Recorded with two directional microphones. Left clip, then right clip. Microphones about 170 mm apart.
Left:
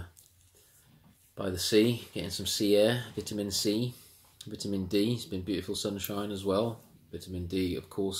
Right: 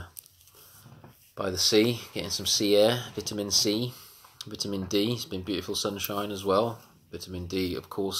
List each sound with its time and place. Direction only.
1.3 s speech: 20° left (ahead or behind)